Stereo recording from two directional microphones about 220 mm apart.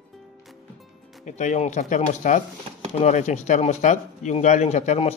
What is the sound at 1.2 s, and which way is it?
Speech, 30° left (ahead or behind).